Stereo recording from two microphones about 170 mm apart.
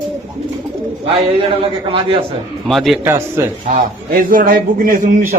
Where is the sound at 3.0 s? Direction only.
15° right (ahead or behind).